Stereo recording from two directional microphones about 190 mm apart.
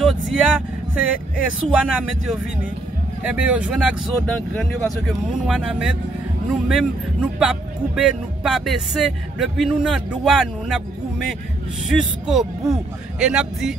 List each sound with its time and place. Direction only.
0.0 s speech: 5° right (ahead or behind)
11.8 s speech: centre (ahead or behind)